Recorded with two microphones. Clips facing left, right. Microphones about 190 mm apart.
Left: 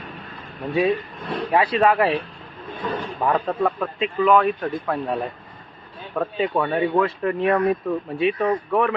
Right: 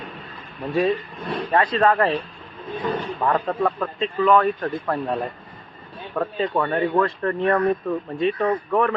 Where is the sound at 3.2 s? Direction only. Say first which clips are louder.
Left 1 dB; 5° left (ahead or behind).